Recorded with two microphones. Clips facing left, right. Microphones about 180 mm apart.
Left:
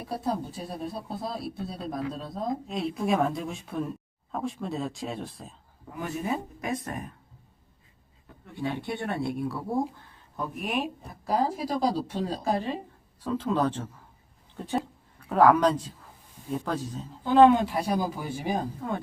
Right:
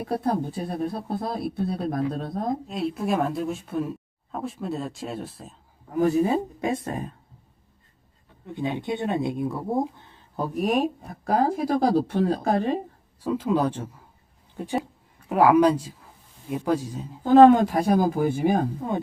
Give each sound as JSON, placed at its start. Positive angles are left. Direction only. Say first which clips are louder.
{"t": 0.0, "sound": "speech", "louder": "right 5 dB", "side_deg": -55}
{"t": 2.6, "sound": "speech", "louder": "right 1 dB", "side_deg": 0}
{"t": 5.9, "sound": "speech", "louder": "right 10 dB", "side_deg": -35}
{"t": 8.4, "sound": "speech", "louder": "right 4 dB", "side_deg": -20}
{"t": 13.2, "sound": "speech", "louder": "right 3 dB", "side_deg": -10}
{"t": 17.2, "sound": "speech", "louder": "right 5 dB", "side_deg": -45}
{"t": 18.8, "sound": "speech", "louder": "right 4 dB", "side_deg": -20}